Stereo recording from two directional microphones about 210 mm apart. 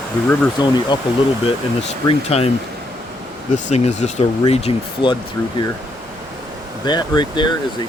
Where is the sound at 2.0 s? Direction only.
30° left (ahead or behind).